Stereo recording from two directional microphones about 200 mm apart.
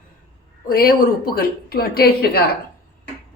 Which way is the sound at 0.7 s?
50° left (ahead or behind).